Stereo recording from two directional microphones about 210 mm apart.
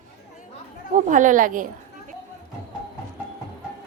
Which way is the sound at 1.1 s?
40° right (ahead or behind).